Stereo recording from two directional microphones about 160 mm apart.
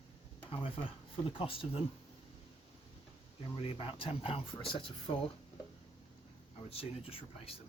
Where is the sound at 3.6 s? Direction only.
35° left (ahead or behind).